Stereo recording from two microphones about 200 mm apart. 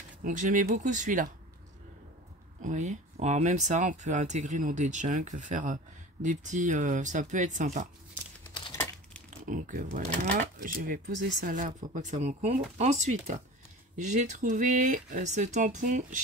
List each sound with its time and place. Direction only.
0.2 s speech: 40° right (ahead or behind)
2.6 s speech: 35° right (ahead or behind)
9.5 s speech: 40° right (ahead or behind)